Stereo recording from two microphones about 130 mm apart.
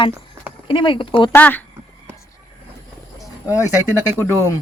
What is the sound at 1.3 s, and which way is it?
Speech, 15° left (ahead or behind).